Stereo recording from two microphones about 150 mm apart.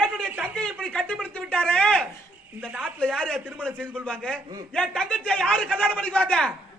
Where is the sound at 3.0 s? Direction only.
5° left (ahead or behind).